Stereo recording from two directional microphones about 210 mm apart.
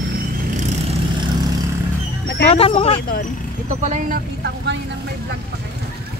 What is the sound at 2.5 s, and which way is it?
Speech, 30° left (ahead or behind).